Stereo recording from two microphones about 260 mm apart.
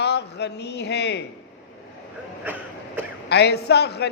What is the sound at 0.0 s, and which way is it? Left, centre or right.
Speech, left.